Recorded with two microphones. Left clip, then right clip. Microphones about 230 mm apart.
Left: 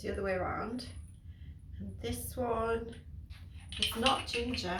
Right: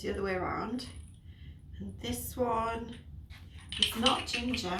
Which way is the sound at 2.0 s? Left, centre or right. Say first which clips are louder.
Right 3 dB; centre.